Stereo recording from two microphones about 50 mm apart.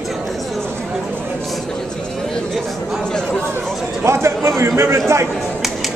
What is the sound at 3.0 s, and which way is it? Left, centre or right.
Speech, centre.